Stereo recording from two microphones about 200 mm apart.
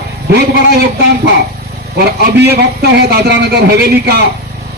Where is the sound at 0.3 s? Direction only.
55° right (ahead or behind).